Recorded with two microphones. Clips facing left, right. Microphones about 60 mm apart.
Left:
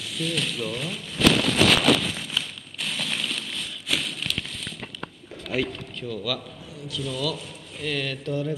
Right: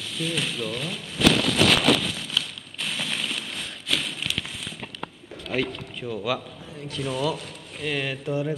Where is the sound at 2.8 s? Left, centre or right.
Centre.